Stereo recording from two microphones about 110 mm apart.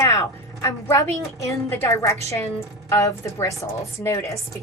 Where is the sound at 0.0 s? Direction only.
35° left (ahead or behind).